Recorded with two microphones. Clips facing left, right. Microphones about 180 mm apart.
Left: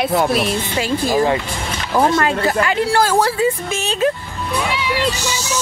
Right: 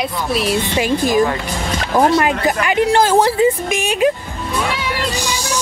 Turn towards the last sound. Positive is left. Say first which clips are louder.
# right 3 dB
turn(degrees=-15)  # may be behind; listen again after turning